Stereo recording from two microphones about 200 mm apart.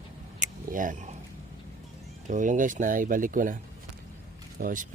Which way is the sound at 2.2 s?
40° right (ahead or behind).